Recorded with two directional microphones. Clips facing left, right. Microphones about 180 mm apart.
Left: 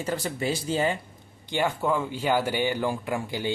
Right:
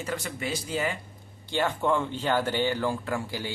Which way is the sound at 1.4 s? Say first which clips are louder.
Even; 10° left (ahead or behind).